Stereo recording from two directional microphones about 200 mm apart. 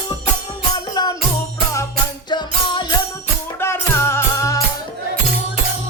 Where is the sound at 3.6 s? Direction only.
10° left (ahead or behind).